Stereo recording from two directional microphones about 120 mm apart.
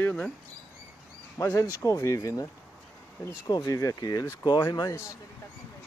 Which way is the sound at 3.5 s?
35° left (ahead or behind).